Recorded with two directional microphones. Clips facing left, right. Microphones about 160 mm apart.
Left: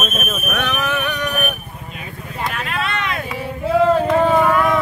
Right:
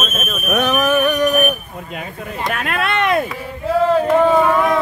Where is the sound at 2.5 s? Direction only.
55° right (ahead or behind).